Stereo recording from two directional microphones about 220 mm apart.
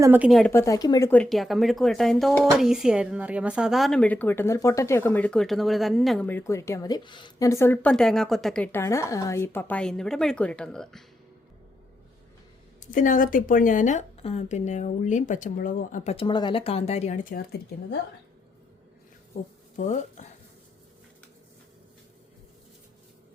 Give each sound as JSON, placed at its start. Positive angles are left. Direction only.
{"t": 0.0, "sound": "speech", "side_deg": -10}
{"t": 12.8, "sound": "a woman's voice", "side_deg": 35}
{"t": 19.7, "sound": "speech", "side_deg": 35}